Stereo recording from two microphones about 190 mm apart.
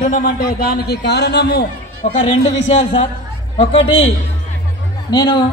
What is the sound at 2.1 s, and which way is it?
Speech, 25° left (ahead or behind).